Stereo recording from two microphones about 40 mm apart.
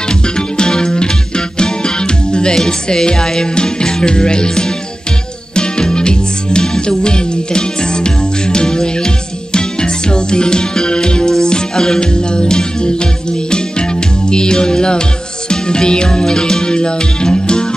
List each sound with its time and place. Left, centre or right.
0.4 s music: left
1.6 s speech: left
5.6 s music: left
14.3 s music: left